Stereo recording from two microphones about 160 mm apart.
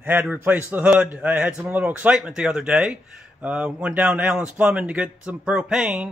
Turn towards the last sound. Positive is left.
turn(degrees=-5)  # may be behind; listen again after turning